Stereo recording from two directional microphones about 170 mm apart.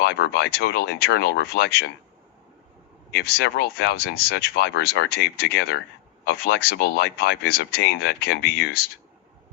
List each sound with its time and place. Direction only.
0.0 s speech: 75° left (ahead or behind)
3.1 s speech: 75° left (ahead or behind)